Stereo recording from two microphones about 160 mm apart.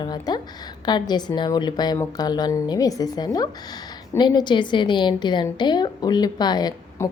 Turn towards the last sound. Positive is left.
turn(degrees=20)  # may be behind; listen again after turning